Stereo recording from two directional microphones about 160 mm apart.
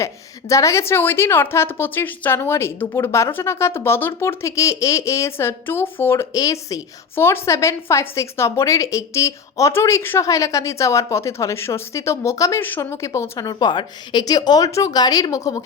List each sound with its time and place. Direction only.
0.0 s a woman's voice: 20° left (ahead or behind)